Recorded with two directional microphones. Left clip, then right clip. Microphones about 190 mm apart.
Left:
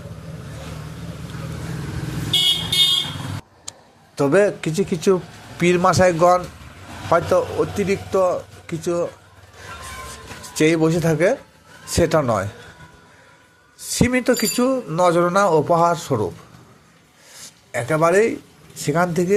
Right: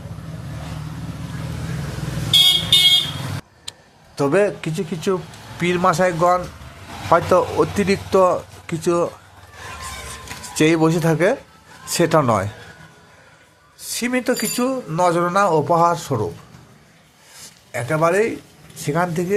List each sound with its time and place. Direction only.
4.1 s speech: 5° left (ahead or behind)
7.1 s speech: 10° right (ahead or behind)
10.5 s speech: 10° right (ahead or behind)
13.9 s speech: 5° left (ahead or behind)
17.4 s speech: 10° left (ahead or behind)